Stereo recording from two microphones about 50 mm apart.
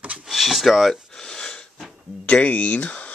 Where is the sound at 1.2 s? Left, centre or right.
Centre.